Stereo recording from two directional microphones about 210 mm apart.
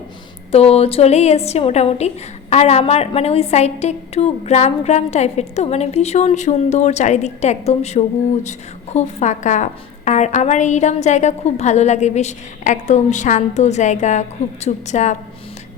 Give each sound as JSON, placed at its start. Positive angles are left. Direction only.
{"t": 0.5, "sound": "a woman's voice", "side_deg": 30}